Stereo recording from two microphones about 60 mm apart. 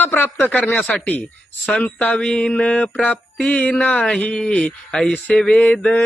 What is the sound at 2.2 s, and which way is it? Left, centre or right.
Mantra, centre.